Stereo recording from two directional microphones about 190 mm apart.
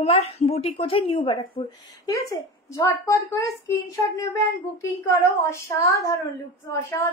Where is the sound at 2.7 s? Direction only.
15° left (ahead or behind).